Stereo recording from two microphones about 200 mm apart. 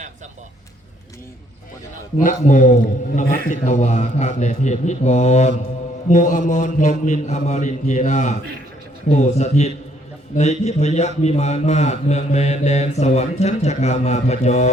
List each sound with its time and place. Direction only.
2.1 s a man's voice: 40° left (ahead or behind)